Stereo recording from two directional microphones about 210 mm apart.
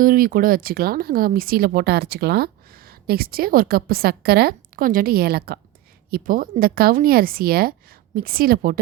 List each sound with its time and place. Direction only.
0.0 s speech: 40° right (ahead or behind)